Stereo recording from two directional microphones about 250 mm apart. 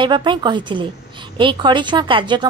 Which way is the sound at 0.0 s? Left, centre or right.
Centre.